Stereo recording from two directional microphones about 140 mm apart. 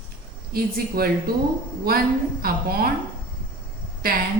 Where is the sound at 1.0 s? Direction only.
90° right.